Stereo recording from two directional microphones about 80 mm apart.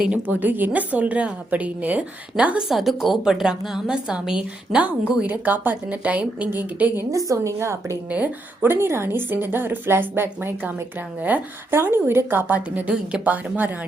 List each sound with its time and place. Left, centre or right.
0.3 s a woman's voice: right
7.3 s a woman's voice: right
8.1 s a woman's voice: right
13.2 s a woman's voice: right